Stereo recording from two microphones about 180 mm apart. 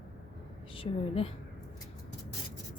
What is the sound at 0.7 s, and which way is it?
Speech, 30° left (ahead or behind).